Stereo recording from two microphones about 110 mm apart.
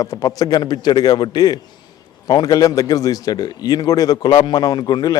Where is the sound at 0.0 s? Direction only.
30° left (ahead or behind).